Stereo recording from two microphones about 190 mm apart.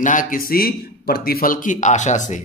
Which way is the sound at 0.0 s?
45° left (ahead or behind).